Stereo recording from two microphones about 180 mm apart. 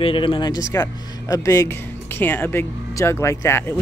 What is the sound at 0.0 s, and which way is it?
Speech, 30° left (ahead or behind).